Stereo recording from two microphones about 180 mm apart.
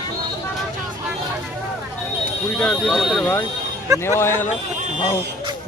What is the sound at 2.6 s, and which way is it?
Speech, 5° left (ahead or behind).